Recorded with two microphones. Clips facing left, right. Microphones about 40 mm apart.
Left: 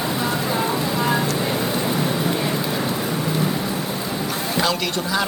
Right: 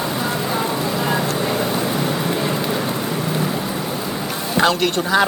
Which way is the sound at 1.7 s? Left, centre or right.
Right.